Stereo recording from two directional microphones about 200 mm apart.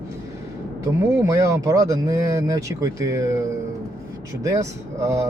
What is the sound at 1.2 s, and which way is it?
Speech, 15° right (ahead or behind).